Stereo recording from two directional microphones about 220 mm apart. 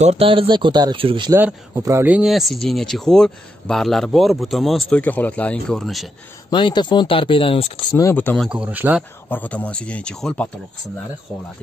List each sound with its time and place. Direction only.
0.0 s speech: 25° right (ahead or behind); by 6.0 s centre (ahead or behind)
6.5 s speech: 20° left (ahead or behind)
8.0 s speech: 10° left (ahead or behind)
8.5 s speech: 5° right (ahead or behind)
9.3 s speech: 5° left (ahead or behind)